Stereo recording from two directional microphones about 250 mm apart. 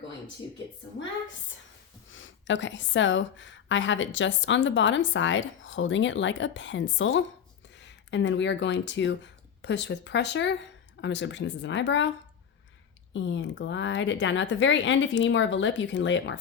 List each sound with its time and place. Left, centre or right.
2.1 s a woman's voice: left
13.1 s a woman's voice: left